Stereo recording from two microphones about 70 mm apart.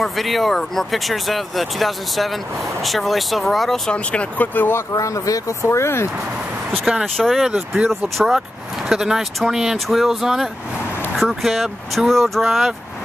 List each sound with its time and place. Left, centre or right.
0.0 s speech: centre
3.9 s speech: centre
4.9 s speech: left
7.2 s speech: centre